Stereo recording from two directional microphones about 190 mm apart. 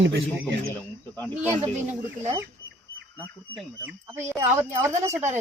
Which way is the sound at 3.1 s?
10° right (ahead or behind).